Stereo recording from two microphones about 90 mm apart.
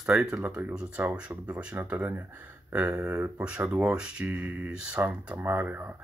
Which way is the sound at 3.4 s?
15° right (ahead or behind).